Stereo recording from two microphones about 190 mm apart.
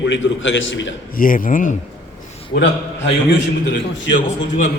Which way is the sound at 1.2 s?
45° left (ahead or behind).